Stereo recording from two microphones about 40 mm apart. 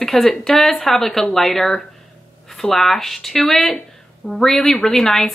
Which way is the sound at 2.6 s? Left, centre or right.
Centre.